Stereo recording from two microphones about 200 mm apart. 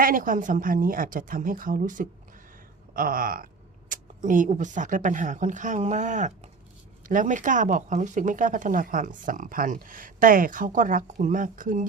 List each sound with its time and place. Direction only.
0.0 s a woman's voice: 45° right (ahead or behind)